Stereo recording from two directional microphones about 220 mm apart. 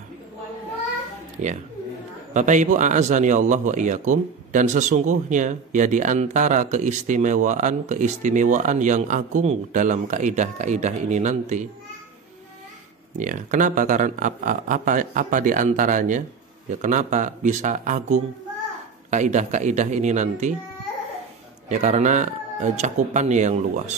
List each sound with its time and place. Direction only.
1.4 s speech: 35° right (ahead or behind)
13.2 s speech: 35° right (ahead or behind)
21.6 s speech: 35° right (ahead or behind)